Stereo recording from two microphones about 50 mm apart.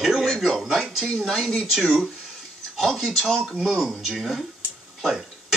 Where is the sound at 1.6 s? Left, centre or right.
Centre.